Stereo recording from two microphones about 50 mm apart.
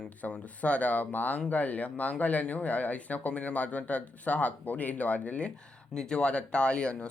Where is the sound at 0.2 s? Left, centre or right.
Left.